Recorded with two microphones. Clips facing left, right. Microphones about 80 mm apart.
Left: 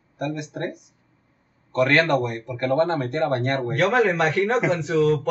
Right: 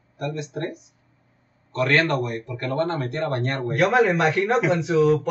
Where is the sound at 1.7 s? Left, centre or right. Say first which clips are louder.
Left 2 dB; left.